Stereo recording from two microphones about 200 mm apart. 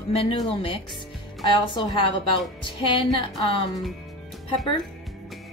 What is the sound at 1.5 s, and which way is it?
Speech, 25° left (ahead or behind).